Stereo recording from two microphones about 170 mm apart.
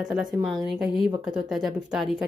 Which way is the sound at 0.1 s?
5° right (ahead or behind).